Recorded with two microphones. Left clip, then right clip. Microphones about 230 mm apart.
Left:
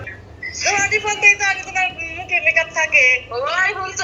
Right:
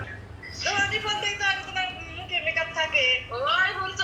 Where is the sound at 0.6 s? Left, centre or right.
Left.